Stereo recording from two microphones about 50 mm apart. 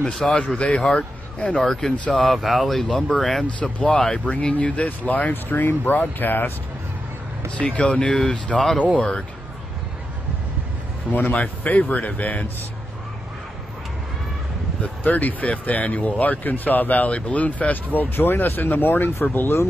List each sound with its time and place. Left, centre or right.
0.2 s speech: centre
1.6 s speech: centre
2.1 s speech: centre
4.3 s speech: left
7.5 s a man's voice: left
11.1 s speech: left
14.8 s speech: left
18.1 s speech: left